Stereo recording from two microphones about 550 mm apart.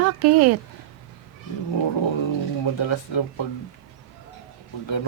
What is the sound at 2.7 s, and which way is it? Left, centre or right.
Speech, left.